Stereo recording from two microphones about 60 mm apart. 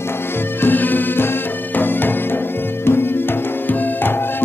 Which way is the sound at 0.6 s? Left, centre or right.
Left.